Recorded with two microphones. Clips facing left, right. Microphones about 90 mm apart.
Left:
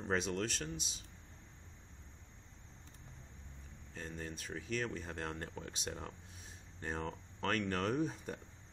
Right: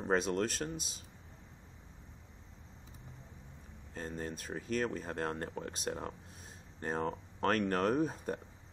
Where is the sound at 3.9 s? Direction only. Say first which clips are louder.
Right 5 dB; 40° right (ahead or behind).